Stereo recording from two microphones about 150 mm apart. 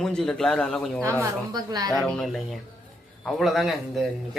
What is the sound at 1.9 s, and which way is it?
Speech, centre (ahead or behind).